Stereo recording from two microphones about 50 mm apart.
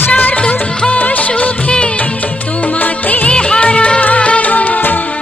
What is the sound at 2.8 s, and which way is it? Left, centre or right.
Music, left.